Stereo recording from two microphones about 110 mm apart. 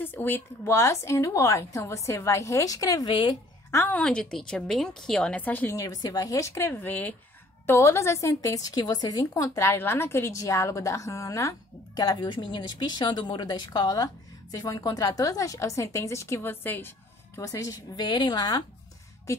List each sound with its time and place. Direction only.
0.0 s a woman's voice: 20° left (ahead or behind); by 3.2 s 35° left (ahead or behind)
3.7 s a woman's voice: 20° left (ahead or behind)
4.0 s a woman's voice: 10° left (ahead or behind)
5.8 s a woman's voice: 35° left (ahead or behind)
17.4 s a woman's voice: 30° left (ahead or behind)